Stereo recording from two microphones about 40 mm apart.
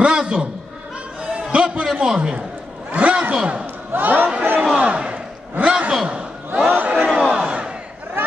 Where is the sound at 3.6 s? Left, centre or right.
Right.